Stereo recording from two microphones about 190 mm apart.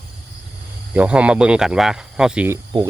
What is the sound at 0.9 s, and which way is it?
Speech, 5° right (ahead or behind).